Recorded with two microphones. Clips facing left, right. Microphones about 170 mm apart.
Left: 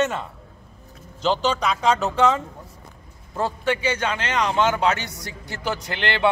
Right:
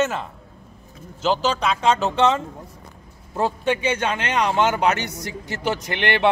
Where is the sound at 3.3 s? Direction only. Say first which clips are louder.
Right 2 dB; 20° right (ahead or behind).